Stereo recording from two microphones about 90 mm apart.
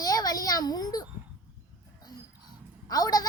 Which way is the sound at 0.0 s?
45° left (ahead or behind).